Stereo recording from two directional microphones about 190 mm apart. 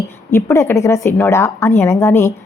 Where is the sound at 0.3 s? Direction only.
15° left (ahead or behind).